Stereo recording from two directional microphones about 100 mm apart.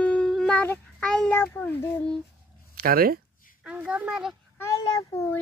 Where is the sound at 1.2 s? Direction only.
20° left (ahead or behind).